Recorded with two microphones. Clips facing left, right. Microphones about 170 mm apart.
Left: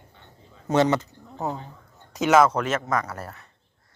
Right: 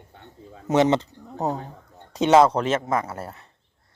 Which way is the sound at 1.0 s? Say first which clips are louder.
Right 3 dB; 35° right (ahead or behind).